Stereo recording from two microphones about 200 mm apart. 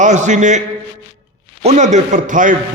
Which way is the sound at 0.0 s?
35° right (ahead or behind).